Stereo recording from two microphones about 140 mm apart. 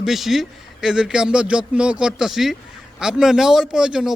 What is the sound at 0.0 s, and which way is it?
A man's voice, centre (ahead or behind).